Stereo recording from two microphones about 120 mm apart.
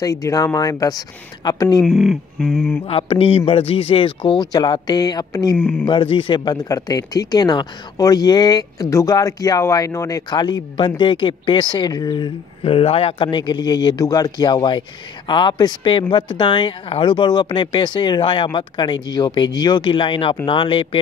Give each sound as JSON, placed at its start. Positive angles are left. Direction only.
{"t": 0.0, "sound": "a man's voice", "side_deg": 30}
{"t": 1.8, "sound": "a sound", "side_deg": 0}
{"t": 2.9, "sound": "speech", "side_deg": 50}
{"t": 5.6, "sound": "speech", "side_deg": 10}
{"t": 5.9, "sound": "a man's voice", "side_deg": 45}
{"t": 12.6, "sound": "a man's voice", "side_deg": 55}